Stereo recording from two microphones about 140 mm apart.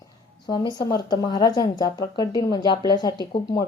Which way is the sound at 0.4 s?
30° left (ahead or behind).